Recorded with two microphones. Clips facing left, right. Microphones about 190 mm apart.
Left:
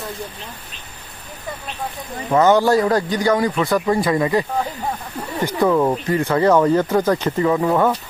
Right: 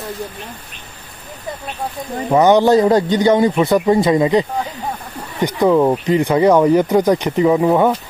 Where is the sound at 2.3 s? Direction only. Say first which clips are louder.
Right 3 dB; 15° right (ahead or behind).